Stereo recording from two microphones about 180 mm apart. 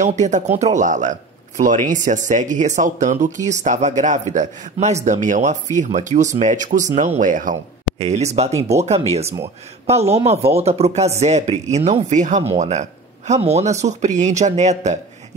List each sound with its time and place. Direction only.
0.0 s speech: 40° right (ahead or behind)